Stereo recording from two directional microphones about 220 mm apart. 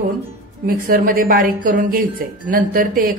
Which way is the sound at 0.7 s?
40° right (ahead or behind).